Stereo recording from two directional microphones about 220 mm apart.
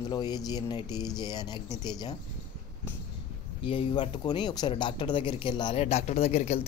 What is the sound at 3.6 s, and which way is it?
Speech, 25° left (ahead or behind).